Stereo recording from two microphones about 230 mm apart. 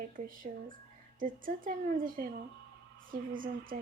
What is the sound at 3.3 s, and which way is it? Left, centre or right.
Speech, right.